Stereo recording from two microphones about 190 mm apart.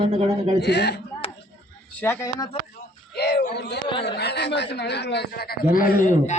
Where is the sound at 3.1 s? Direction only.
60° left (ahead or behind).